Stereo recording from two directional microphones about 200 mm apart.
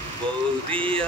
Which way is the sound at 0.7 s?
25° right (ahead or behind).